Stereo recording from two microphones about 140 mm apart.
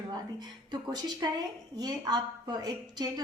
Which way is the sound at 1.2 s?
30° right (ahead or behind).